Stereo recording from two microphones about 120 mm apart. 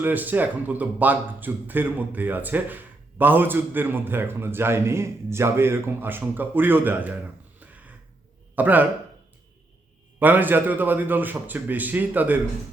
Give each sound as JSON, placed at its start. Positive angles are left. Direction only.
{"t": 0.0, "sound": "a man's voice", "side_deg": -15}
{"t": 7.6, "sound": "a sound", "side_deg": -15}
{"t": 8.5, "sound": "a man's voice", "side_deg": -15}
{"t": 10.2, "sound": "a man's voice", "side_deg": -15}